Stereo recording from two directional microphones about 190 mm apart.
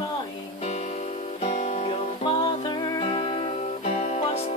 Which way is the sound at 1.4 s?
35° left (ahead or behind).